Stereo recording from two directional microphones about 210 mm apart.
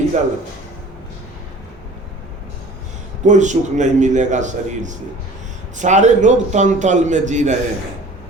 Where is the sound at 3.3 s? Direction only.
35° right (ahead or behind).